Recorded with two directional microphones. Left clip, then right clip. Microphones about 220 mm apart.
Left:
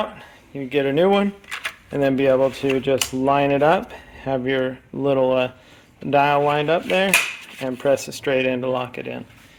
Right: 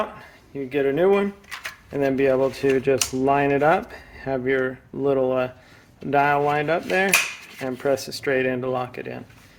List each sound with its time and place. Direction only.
0.5 s speech: 35° left (ahead or behind)